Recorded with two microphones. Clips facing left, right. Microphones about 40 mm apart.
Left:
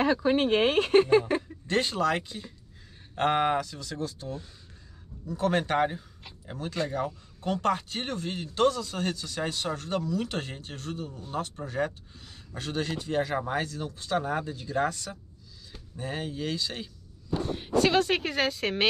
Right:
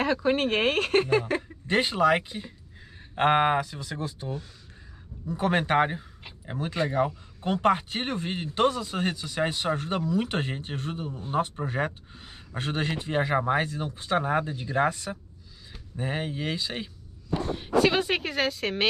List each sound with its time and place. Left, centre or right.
0.2 s speech: right
1.7 s speech: right
17.8 s speech: centre